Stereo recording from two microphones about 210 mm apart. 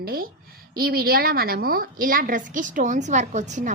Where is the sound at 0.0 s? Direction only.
45° right (ahead or behind).